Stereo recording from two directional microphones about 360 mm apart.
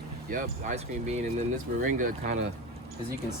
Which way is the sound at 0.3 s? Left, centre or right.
Right.